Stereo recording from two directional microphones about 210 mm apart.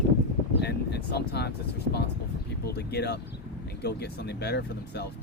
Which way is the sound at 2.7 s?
50° left (ahead or behind).